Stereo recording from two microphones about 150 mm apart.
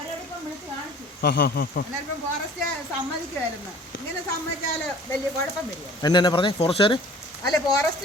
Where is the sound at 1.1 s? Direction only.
90° left.